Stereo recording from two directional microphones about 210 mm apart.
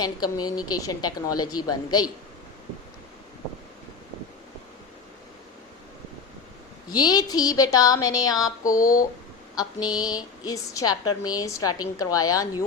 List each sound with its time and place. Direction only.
0.0 s a woman's voice: 20° left (ahead or behind)
6.9 s a woman's voice: 20° left (ahead or behind)